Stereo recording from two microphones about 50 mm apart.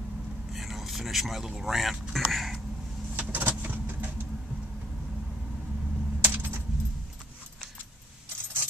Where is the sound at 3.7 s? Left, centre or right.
Right.